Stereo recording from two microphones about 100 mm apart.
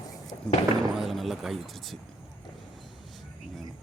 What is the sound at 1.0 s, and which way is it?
Speech, centre (ahead or behind).